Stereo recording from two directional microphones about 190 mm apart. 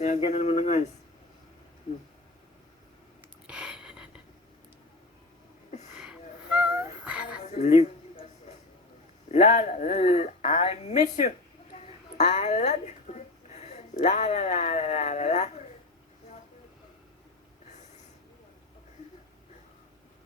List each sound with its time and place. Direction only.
0.0 s speech: 35° left (ahead or behind)
3.4 s a sound: 5° right (ahead or behind)
7.0 s music: 5° right (ahead or behind)
7.4 s a sound: 35° left (ahead or behind)
9.3 s a woman's voice: 35° left (ahead or behind)
17.7 s snort: 35° left (ahead or behind)